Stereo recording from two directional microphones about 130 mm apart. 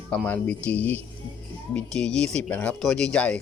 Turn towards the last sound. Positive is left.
turn(degrees=5)  # may be behind; listen again after turning